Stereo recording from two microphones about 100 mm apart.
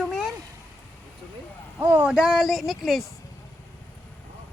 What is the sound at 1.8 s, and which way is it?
Speech, 25° right (ahead or behind).